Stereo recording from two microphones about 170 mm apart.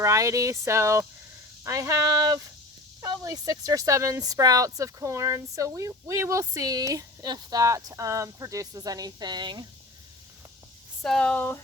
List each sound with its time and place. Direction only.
0.0 s speech: 20° right (ahead or behind)
11.0 s speech: 5° left (ahead or behind)